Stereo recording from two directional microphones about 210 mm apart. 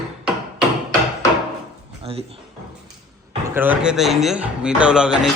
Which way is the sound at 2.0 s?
25° right (ahead or behind).